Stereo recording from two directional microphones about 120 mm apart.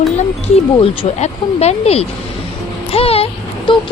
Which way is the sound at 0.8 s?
55° left (ahead or behind).